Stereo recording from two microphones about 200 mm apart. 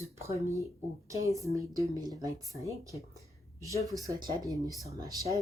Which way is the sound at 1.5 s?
15° right (ahead or behind).